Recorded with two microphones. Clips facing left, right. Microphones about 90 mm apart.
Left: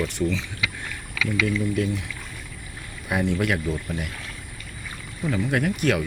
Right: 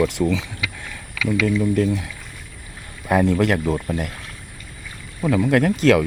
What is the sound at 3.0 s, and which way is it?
Speech, 75° right (ahead or behind).